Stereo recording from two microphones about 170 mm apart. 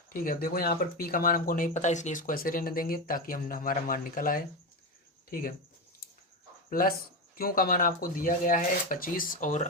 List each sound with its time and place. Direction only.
0.1 s speech: 55° left (ahead or behind)
6.0 s a sound: 60° left (ahead or behind)
6.7 s speech: 60° left (ahead or behind)